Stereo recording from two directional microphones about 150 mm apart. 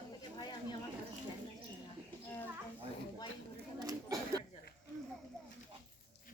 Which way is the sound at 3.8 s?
25° right (ahead or behind).